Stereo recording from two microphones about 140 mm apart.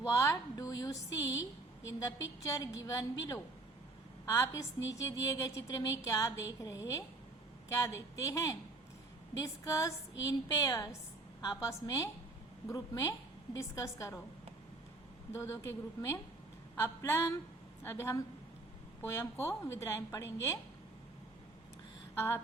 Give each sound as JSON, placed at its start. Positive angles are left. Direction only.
{"t": 0.1, "sound": "a sound", "side_deg": 20}
{"t": 1.9, "sound": "a woman's voice", "side_deg": 25}
{"t": 15.3, "sound": "a woman's voice", "side_deg": 20}